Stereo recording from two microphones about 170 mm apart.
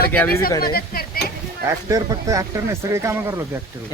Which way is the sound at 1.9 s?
20° right (ahead or behind).